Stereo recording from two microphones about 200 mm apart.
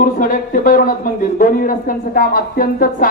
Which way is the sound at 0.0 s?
45° left (ahead or behind).